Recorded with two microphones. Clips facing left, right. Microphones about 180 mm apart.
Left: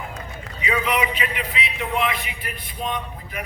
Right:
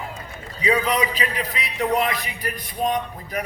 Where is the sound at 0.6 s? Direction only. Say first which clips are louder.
Right 2 dB; 35° right (ahead or behind).